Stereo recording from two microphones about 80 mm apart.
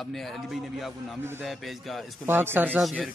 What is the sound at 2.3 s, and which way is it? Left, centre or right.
Speech, right.